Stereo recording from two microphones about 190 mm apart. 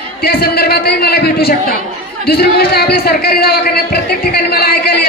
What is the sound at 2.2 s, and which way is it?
A man's voice, 55° left (ahead or behind).